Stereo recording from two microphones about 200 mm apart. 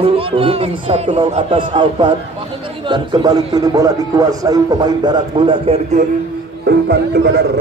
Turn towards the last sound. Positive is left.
turn(degrees=-55)  # may be behind; listen again after turning